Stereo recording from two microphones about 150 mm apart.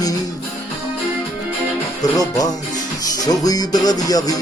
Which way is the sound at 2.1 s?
25° left (ahead or behind).